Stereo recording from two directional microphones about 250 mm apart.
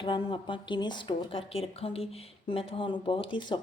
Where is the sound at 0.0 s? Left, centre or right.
Centre.